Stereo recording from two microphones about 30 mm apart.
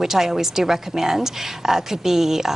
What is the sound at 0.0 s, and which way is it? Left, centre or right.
A woman's voice, centre.